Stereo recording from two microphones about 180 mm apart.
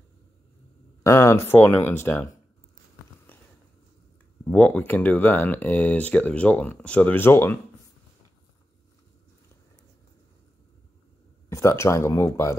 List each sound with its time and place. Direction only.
1.0 s speech: 15° left (ahead or behind)
3.3 s a sound: 10° left (ahead or behind)
4.5 s speech: 10° left (ahead or behind)
11.4 s speech: 15° left (ahead or behind)